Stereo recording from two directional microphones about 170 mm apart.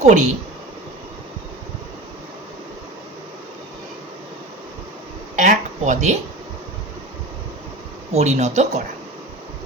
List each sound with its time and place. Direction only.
0.0 s speech: 45° right (ahead or behind)
5.4 s a sound: 45° right (ahead or behind)
8.1 s speech: 40° right (ahead or behind)